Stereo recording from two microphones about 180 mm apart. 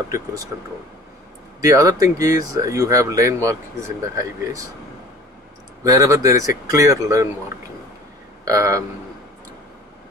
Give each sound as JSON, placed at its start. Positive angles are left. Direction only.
{"t": 0.1, "sound": "speech", "side_deg": -20}
{"t": 1.6, "sound": "speech", "side_deg": -20}
{"t": 5.9, "sound": "speech", "side_deg": -20}